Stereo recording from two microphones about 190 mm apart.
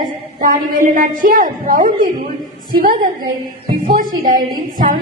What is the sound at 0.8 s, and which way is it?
A woman's voice, 45° right (ahead or behind).